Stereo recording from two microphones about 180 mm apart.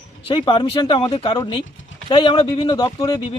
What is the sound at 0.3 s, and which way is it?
Speech, 30° left (ahead or behind).